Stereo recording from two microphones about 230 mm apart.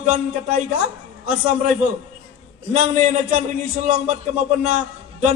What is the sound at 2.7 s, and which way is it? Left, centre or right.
A man's voice, right.